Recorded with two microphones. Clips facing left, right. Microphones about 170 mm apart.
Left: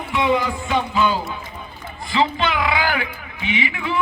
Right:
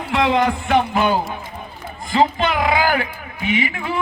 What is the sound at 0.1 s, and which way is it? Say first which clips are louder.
Speech: right 3 dB; 90° right.